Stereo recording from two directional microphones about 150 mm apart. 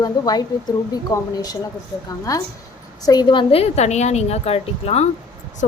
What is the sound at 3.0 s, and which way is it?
A woman's voice, 25° left (ahead or behind).